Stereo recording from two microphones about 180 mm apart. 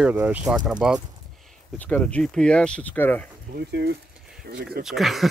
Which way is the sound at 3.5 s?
60° right (ahead or behind).